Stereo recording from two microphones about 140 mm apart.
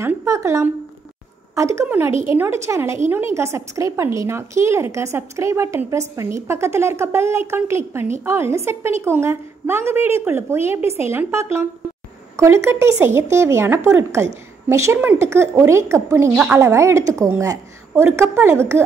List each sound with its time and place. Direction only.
0.0 s a woman's voice: 20° right (ahead or behind)